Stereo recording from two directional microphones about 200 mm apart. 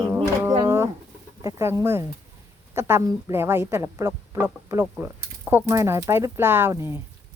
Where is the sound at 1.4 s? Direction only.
15° right (ahead or behind).